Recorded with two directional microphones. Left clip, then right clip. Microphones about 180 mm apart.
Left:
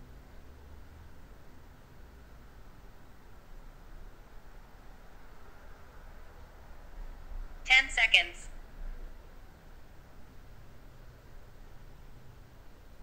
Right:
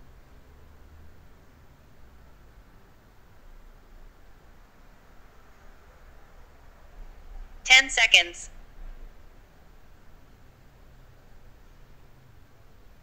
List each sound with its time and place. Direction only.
7.6 s a woman's voice: 50° right (ahead or behind)